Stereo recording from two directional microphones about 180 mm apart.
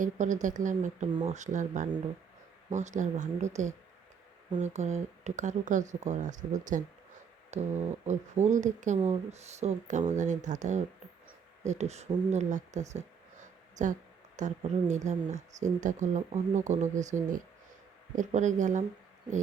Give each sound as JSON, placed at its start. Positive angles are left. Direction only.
{"t": 0.0, "sound": "speech", "side_deg": -45}